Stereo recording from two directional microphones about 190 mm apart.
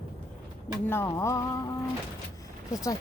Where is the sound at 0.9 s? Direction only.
15° left (ahead or behind).